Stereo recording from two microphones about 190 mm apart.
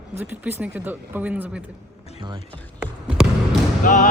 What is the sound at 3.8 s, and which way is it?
Speech, 45° left (ahead or behind).